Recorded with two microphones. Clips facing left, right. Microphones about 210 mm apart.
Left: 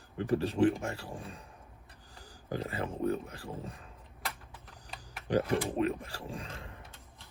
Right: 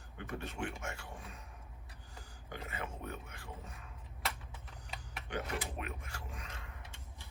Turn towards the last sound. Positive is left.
turn(degrees=30)  # may be behind; listen again after turning